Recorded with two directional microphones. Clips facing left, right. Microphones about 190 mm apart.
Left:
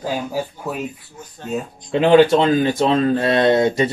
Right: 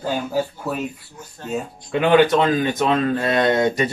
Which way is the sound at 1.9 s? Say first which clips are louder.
Left 3 dB; 25° left (ahead or behind).